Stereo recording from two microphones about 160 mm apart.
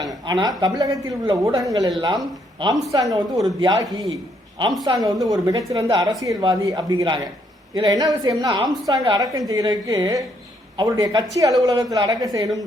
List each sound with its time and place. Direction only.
0.0 s a woman's voice: 25° right (ahead or behind)
4.9 s a woman's voice: 25° right (ahead or behind)